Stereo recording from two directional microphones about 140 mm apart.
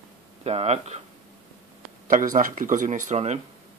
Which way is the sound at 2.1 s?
75° right (ahead or behind).